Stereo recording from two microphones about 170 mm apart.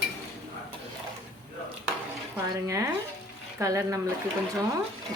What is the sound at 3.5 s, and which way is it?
Speech, 20° right (ahead or behind).